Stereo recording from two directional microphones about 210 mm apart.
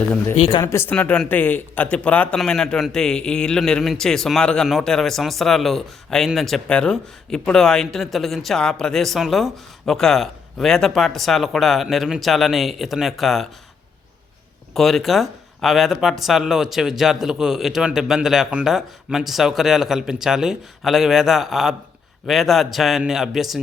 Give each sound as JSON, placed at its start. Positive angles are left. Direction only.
{"t": 0.3, "sound": "speech", "side_deg": 25}
{"t": 0.6, "sound": "a man's voice", "side_deg": 10}
{"t": 14.7, "sound": "a man's voice", "side_deg": 0}